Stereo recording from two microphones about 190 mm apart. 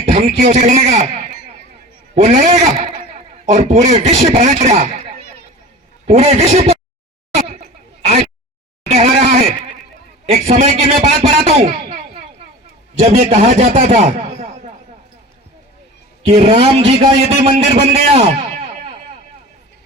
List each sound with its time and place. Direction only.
0.3 s a man's voice: 35° right (ahead or behind)
6.1 s a man's voice: 35° right (ahead or behind)
7.3 s a sound: 35° right (ahead or behind)
8.9 s a sound: 35° right (ahead or behind)
10.3 s a man's voice: 35° right (ahead or behind)
16.2 s a man's voice: 35° right (ahead or behind)